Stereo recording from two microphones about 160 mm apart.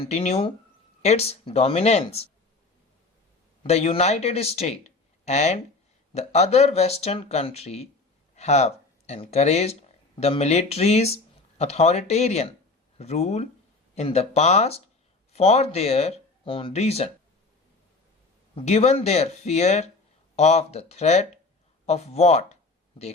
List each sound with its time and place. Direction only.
0.0 s speech: 40° left (ahead or behind)
3.6 s speech: 40° left (ahead or behind)
18.5 s speech: 40° left (ahead or behind)